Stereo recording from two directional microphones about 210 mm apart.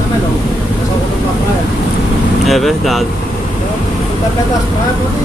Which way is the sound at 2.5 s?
Centre (ahead or behind).